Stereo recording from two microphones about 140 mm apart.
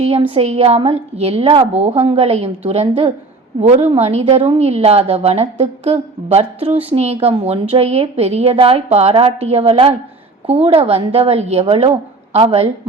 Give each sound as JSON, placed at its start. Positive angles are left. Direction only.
{"t": 0.0, "sound": "a woman's voice", "side_deg": -45}